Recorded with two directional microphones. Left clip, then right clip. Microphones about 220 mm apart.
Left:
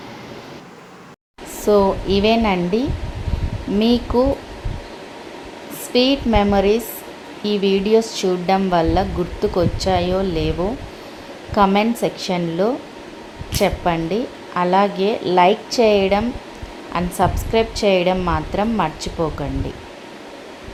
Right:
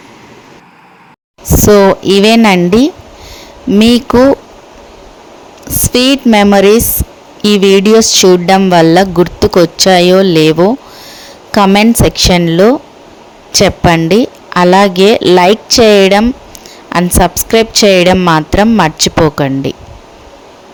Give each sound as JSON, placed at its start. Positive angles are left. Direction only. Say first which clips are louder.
{"t": 1.6, "sound": "speech", "louder": "right 10 dB", "side_deg": -50}
{"t": 5.9, "sound": "speech", "louder": "right 8 dB", "side_deg": -50}